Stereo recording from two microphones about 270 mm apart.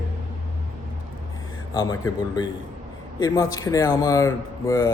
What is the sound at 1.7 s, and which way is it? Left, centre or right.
Speech, centre.